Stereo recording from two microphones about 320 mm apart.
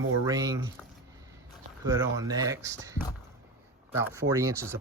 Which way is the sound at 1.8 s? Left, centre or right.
Centre.